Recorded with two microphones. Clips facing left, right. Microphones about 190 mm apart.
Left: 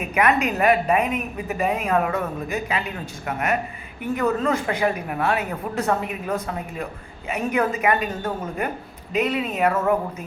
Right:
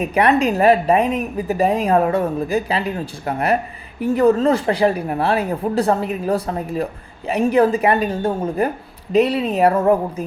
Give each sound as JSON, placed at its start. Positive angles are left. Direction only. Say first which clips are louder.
{"t": 0.0, "sound": "a woman's voice", "louder": "right 5 dB", "side_deg": -35}